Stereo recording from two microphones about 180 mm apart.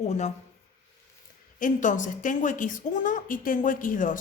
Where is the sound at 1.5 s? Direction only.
45° left (ahead or behind).